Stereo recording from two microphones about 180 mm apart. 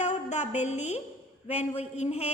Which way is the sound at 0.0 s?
40° left (ahead or behind).